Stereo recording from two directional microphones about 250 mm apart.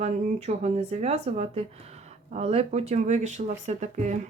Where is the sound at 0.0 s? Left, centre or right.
Right.